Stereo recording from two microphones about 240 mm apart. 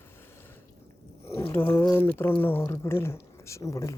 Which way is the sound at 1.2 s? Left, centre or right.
Centre.